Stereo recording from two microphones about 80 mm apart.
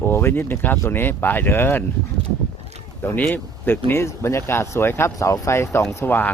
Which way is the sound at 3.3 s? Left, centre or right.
Left.